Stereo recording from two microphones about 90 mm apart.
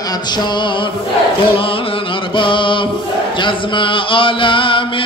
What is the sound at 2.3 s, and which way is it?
Chant, 65° left (ahead or behind).